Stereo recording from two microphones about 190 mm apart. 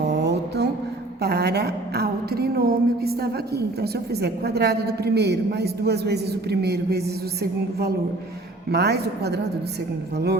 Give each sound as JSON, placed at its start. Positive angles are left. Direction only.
{"t": 0.1, "sound": "mantra", "side_deg": -65}
{"t": 1.2, "sound": "a woman's voice", "side_deg": -60}